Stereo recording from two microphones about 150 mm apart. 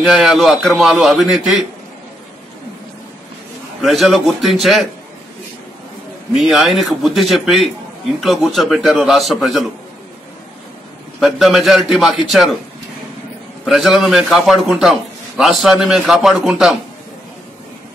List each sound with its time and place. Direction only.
0.0 s a man's voice: centre (ahead or behind)
3.8 s a man's voice: centre (ahead or behind)
6.3 s a man's voice: centre (ahead or behind)
11.1 s a man's voice: centre (ahead or behind)
13.7 s a man's voice: centre (ahead or behind)